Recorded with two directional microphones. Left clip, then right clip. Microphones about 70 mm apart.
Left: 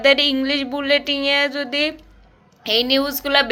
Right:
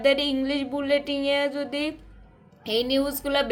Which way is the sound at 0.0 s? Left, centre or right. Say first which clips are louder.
Left 7 dB; right.